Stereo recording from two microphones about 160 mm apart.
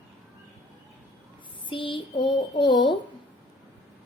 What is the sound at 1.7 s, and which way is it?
Child singing, 30° left (ahead or behind).